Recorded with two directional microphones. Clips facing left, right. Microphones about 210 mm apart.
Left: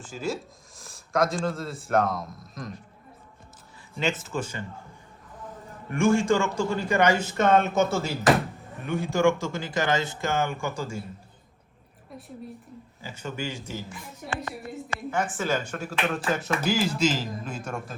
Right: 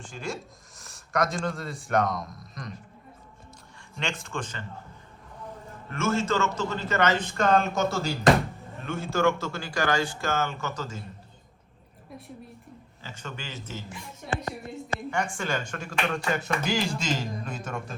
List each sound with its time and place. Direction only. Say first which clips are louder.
0.0 s speech: left 4 dB; 5° left (ahead or behind)
3.9 s speech: left 5 dB; 5° left (ahead or behind)
5.9 s a man's voice: left 5 dB; 15° left (ahead or behind)
8.8 s a man's voice: left 2 dB; 15° left (ahead or behind)
13.0 s a man's voice: left 6 dB; 10° left (ahead or behind)
15.1 s speech: left 4 dB; 5° left (ahead or behind)